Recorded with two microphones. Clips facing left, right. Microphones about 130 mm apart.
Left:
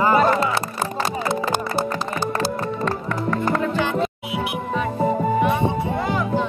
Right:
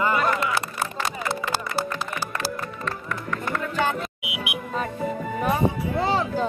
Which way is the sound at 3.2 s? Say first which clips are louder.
Left 8 dB; 35° left (ahead or behind).